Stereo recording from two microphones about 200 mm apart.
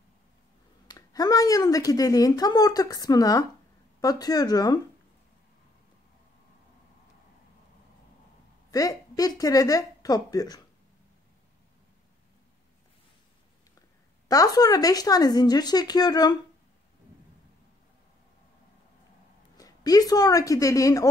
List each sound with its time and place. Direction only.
0.8 s a woman's voice: 20° left (ahead or behind)
8.6 s a woman's voice: 15° left (ahead or behind)
14.2 s a woman's voice: 15° left (ahead or behind)
19.5 s a woman's voice: 20° left (ahead or behind)